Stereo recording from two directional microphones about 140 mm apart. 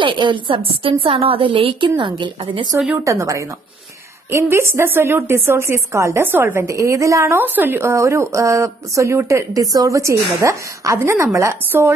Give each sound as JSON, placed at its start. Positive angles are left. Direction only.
{"t": 0.0, "sound": "a woman's voice", "side_deg": -35}